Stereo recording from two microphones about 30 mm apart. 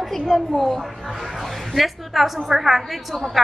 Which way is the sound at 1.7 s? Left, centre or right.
Centre.